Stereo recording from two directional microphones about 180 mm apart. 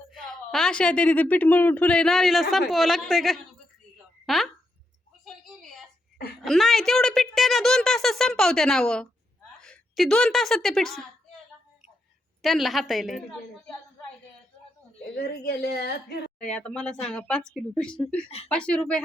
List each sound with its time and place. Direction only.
0.1 s speech: centre (ahead or behind)
5.2 s a sound: centre (ahead or behind)
6.4 s a woman's voice: centre (ahead or behind)
12.4 s speech: centre (ahead or behind)
15.1 s a woman's voice: 60° left (ahead or behind)
16.4 s speech: 5° left (ahead or behind)